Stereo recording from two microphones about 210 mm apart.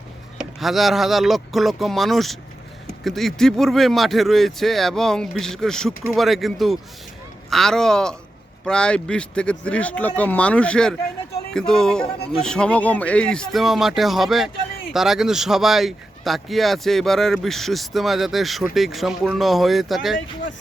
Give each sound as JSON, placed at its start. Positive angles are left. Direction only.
{"t": 0.3, "sound": "speech", "side_deg": 0}